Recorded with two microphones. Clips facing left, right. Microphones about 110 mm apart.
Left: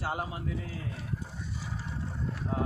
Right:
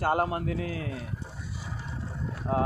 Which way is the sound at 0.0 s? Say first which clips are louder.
Right 8 dB; 55° right (ahead or behind).